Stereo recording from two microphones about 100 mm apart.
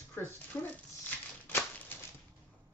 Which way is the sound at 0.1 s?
20° left (ahead or behind).